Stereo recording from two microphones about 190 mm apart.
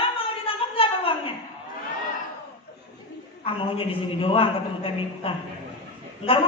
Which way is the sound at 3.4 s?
30° left (ahead or behind).